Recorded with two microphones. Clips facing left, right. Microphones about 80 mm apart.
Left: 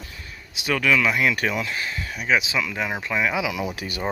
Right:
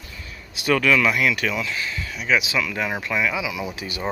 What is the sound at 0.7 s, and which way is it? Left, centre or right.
Speech, centre.